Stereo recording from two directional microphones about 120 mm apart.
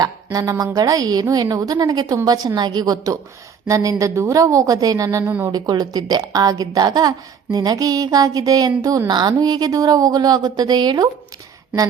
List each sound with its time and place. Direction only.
0.0 s a woman's voice: 30° right (ahead or behind)
5.2 s speech: 10° right (ahead or behind)
5.5 s a woman's voice: 35° right (ahead or behind)